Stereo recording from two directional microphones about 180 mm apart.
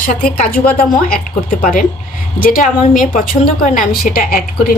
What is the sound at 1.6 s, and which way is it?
A woman's voice, 45° left (ahead or behind).